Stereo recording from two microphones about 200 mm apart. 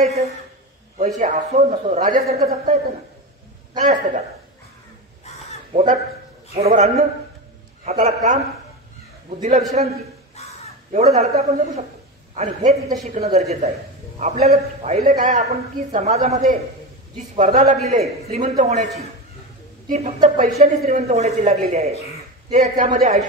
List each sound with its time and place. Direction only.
0.9 s a man's voice: 40° right (ahead or behind)
5.7 s a man's voice: 30° right (ahead or behind)
9.8 s a man's voice: 35° right (ahead or behind)
10.4 s crow: 35° left (ahead or behind)
10.9 s a man's voice: 35° right (ahead or behind)
17.4 s a man's voice: 40° right (ahead or behind)